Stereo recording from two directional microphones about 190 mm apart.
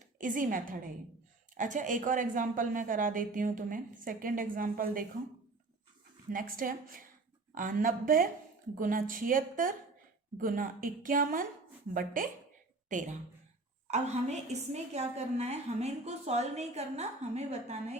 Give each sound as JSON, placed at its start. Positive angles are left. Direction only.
{"t": 0.2, "sound": "speech", "side_deg": -45}
{"t": 6.3, "sound": "a woman's voice", "side_deg": -45}